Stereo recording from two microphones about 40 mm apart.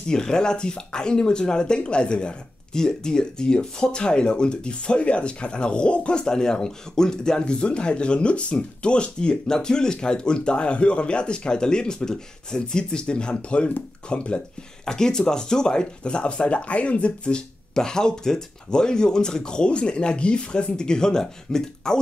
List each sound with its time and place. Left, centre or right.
0.1 s speech: centre
14.9 s speech: centre